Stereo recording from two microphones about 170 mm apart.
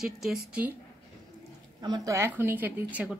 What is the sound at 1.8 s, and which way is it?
A woman's voice, 20° right (ahead or behind).